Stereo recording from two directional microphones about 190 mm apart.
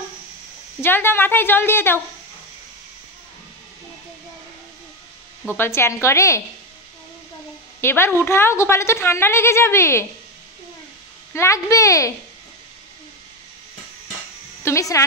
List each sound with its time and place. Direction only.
0.7 s a woman's voice: 10° left (ahead or behind)
5.6 s a woman's voice: 15° left (ahead or behind)
7.8 s a woman's voice: 10° left (ahead or behind)
11.3 s a woman's voice: 15° left (ahead or behind)
14.6 s a woman's voice: 15° left (ahead or behind)